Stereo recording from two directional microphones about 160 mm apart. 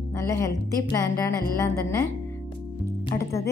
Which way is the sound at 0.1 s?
20° left (ahead or behind).